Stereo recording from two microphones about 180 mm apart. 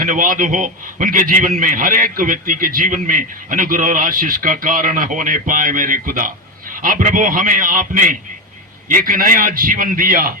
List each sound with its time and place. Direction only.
0.0 s a man's voice: 50° right (ahead or behind)